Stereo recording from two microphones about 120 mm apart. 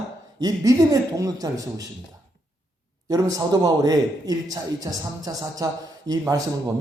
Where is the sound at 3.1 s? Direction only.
30° right (ahead or behind).